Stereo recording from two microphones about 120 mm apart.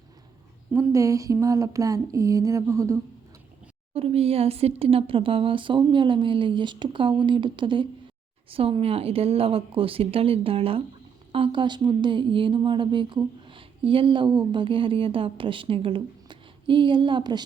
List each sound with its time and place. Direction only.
0.7 s speech: 25° right (ahead or behind)
3.9 s speech: 55° right (ahead or behind); by 17.4 s 40° right (ahead or behind)